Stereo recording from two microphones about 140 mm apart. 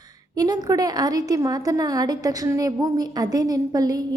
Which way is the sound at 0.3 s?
25° right (ahead or behind).